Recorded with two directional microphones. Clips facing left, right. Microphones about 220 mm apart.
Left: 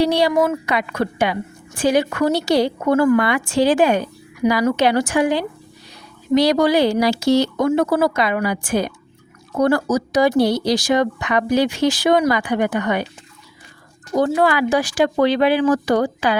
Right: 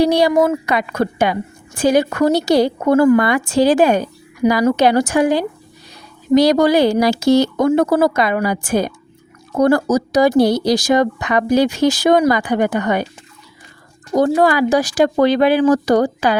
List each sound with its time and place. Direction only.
0.0 s a woman's voice: 45° right (ahead or behind)
14.2 s a woman's voice: 40° right (ahead or behind)